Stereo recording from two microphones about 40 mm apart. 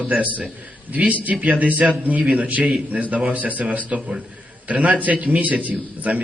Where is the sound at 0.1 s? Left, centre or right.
Right.